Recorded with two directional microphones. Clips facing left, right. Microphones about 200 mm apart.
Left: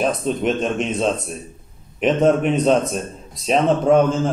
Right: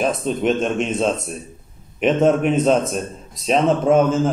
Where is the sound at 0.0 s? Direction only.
Centre (ahead or behind).